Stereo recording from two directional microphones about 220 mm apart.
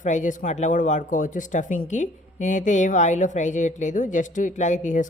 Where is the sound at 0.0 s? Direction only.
35° left (ahead or behind).